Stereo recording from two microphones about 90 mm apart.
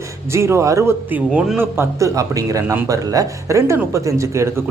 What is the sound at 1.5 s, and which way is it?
Speech, 25° right (ahead or behind).